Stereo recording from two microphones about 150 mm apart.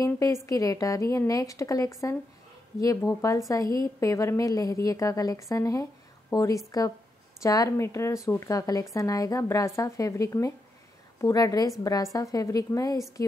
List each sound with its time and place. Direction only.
0.0 s a woman's voice: 20° left (ahead or behind)